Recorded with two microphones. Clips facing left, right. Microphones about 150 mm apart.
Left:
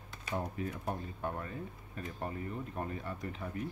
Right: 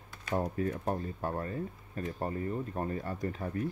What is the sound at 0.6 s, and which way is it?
Speech, 40° right (ahead or behind).